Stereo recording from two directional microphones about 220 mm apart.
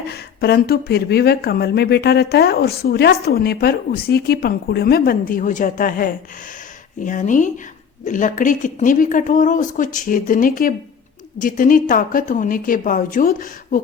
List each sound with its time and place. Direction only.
0.1 s speech: 45° left (ahead or behind)